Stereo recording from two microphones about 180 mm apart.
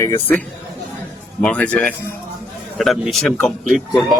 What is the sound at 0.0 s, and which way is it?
Speech, 15° left (ahead or behind).